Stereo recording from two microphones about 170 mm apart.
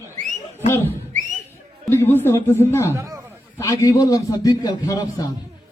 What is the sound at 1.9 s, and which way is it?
A man's voice, 15° left (ahead or behind).